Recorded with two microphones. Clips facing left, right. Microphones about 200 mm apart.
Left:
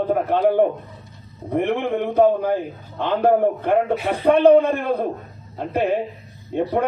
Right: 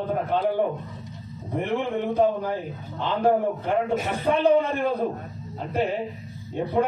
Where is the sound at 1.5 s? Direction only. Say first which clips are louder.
Left 5 dB; 60° left (ahead or behind).